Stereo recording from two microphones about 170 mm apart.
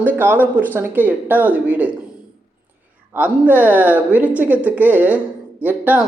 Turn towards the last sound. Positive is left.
turn(degrees=-10)  # may be behind; listen again after turning